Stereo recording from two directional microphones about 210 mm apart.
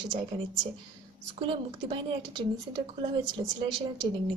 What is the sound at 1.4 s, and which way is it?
A woman's voice, 25° right (ahead or behind).